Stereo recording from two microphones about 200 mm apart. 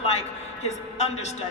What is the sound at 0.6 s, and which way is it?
Speech, 35° left (ahead or behind).